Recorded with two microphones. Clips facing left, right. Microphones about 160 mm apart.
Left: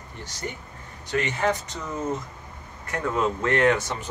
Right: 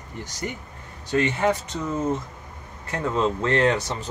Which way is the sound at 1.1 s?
25° right (ahead or behind).